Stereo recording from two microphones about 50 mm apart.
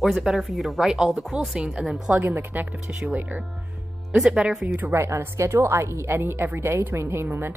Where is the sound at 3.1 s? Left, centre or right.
Right.